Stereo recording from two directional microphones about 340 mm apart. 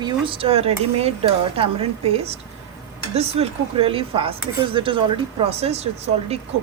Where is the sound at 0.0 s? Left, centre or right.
Centre.